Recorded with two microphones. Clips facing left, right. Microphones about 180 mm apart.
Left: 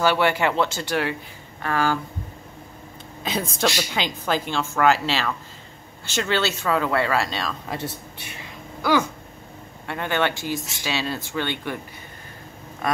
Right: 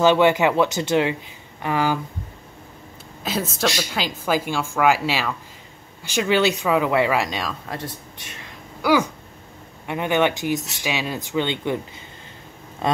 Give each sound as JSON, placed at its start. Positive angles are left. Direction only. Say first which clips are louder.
{"t": 0.0, "sound": "speech", "louder": "right 4 dB", "side_deg": -20}
{"t": 3.3, "sound": "speech", "louder": "right 1 dB", "side_deg": -5}
{"t": 7.6, "sound": "speech", "louder": "left 1 dB", "side_deg": 5}
{"t": 8.8, "sound": "speech", "louder": "right 2 dB", "side_deg": -10}
{"t": 12.8, "sound": "speech", "louder": "right 3 dB", "side_deg": -25}